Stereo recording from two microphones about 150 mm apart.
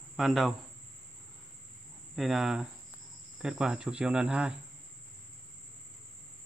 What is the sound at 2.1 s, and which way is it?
Speech, centre (ahead or behind).